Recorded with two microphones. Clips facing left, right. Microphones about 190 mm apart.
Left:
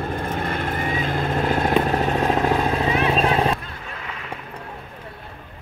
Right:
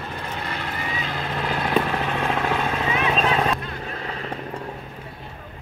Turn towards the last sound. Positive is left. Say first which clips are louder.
# right 3 dB
turn(degrees=-35)  # may be behind; listen again after turning